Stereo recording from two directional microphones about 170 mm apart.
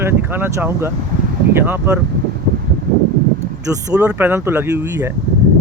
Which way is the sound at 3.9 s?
10° right (ahead or behind).